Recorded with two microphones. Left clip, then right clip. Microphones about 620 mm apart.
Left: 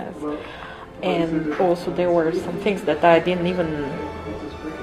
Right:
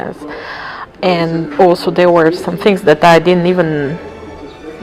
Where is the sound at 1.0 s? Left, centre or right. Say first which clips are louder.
Right 8 dB; right.